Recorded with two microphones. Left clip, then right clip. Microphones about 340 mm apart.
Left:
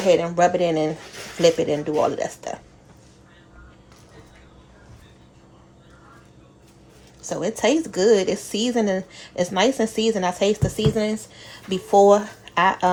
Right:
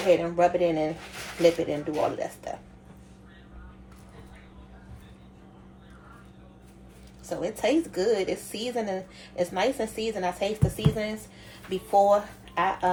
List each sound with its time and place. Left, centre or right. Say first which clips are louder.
0.1 s a woman's voice: left 4 dB; left
7.2 s a woman's voice: left 6 dB; left